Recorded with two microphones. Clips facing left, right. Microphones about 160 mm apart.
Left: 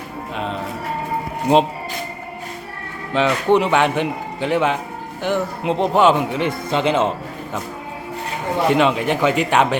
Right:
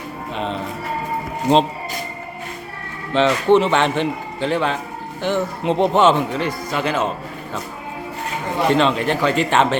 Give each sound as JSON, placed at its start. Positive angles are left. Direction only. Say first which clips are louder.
{"t": 0.3, "sound": "speech", "louder": "right 1 dB", "side_deg": 5}
{"t": 3.1, "sound": "a man's voice", "louder": "right 2 dB", "side_deg": 10}
{"t": 5.7, "sound": "speech", "louder": "even", "side_deg": 0}
{"t": 6.1, "sound": "a man's voice", "louder": "even", "side_deg": 15}
{"t": 8.7, "sound": "a man's voice", "louder": "even", "side_deg": 10}